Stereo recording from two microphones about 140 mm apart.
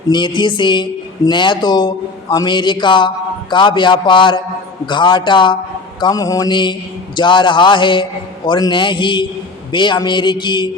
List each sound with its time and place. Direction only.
0.1 s speech: 35° left (ahead or behind)
6.0 s mantra: 25° left (ahead or behind)
7.2 s speech: 35° left (ahead or behind)